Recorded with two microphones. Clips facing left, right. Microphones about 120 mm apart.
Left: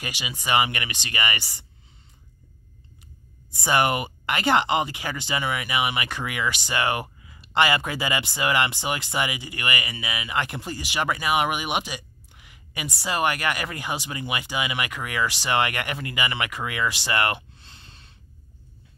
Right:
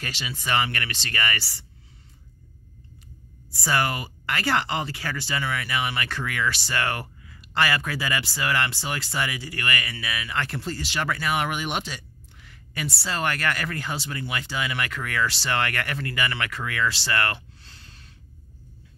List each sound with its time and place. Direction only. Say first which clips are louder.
0.0 s speech: left 1 dB; 15° left (ahead or behind)
3.5 s speech: left 3 dB; 20° left (ahead or behind)